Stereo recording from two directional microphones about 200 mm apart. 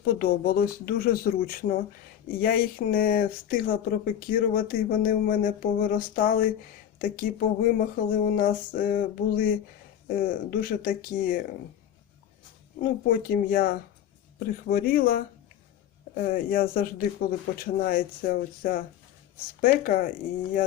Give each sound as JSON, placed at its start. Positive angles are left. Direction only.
{"t": 0.0, "sound": "speech", "side_deg": 50}
{"t": 13.1, "sound": "speech", "side_deg": 45}